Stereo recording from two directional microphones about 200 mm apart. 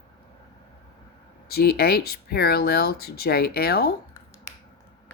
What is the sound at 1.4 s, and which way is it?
Speech, 50° left (ahead or behind).